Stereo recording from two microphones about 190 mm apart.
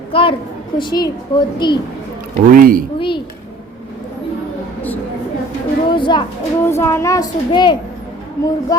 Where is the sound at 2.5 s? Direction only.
50° right (ahead or behind).